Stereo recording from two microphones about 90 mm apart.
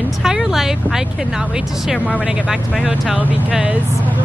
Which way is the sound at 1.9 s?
15° left (ahead or behind).